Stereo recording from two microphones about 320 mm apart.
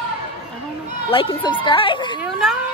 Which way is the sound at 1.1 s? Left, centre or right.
Centre.